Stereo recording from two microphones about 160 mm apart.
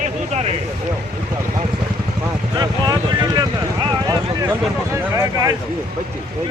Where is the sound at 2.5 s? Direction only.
25° right (ahead or behind).